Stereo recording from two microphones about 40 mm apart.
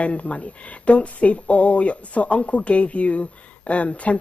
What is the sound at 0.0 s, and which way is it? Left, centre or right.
A woman's voice, left.